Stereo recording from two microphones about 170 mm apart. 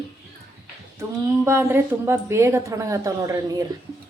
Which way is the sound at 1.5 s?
15° right (ahead or behind).